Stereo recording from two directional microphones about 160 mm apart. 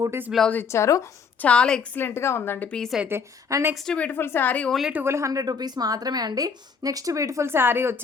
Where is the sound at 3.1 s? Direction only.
15° right (ahead or behind).